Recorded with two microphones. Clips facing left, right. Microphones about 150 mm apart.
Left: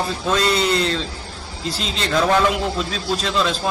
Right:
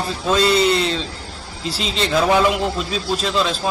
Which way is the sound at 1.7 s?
5° right (ahead or behind).